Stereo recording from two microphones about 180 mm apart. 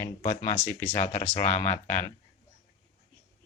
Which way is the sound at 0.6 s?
10° left (ahead or behind).